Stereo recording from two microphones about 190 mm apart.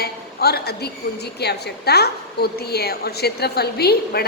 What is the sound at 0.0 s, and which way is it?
A woman's voice, 55° left (ahead or behind).